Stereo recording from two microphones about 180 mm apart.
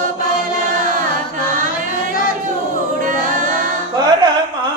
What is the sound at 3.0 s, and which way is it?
A capella, 45° right (ahead or behind).